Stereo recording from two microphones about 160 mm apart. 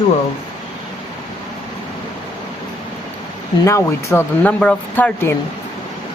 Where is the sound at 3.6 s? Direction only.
20° left (ahead or behind).